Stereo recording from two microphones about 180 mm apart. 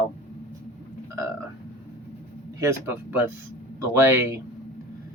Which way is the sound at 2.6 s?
15° right (ahead or behind).